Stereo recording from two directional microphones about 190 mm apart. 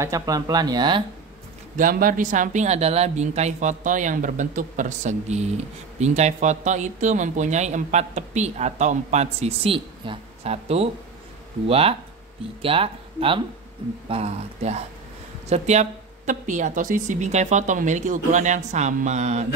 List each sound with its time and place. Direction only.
0.0 s speech: 15° right (ahead or behind)
1.8 s speech: 50° right (ahead or behind)